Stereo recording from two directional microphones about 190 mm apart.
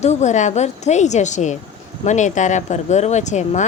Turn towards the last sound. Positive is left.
turn(degrees=40)  # may be behind; listen again after turning